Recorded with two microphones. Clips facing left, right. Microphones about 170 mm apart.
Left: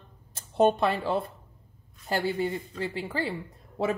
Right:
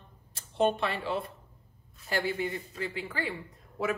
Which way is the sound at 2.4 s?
30° left (ahead or behind).